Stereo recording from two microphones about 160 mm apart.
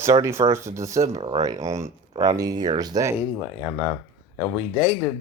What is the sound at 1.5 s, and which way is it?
Speech, 20° right (ahead or behind).